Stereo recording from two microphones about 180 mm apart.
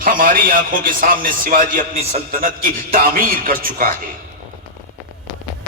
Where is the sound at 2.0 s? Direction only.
35° right (ahead or behind).